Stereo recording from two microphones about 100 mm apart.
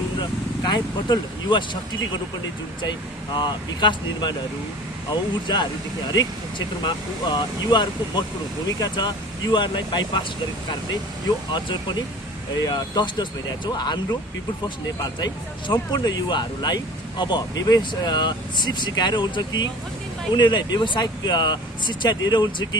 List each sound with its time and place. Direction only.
0.2 s speech: 45° left (ahead or behind)
3.3 s speech: 50° left (ahead or behind)
5.5 s speech: 45° left (ahead or behind)
6.8 s speech: 45° left (ahead or behind)
11.5 s speech: 50° left (ahead or behind)